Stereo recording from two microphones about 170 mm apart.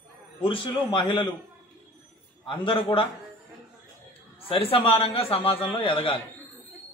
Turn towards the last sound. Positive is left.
turn(degrees=30)  # may be behind; listen again after turning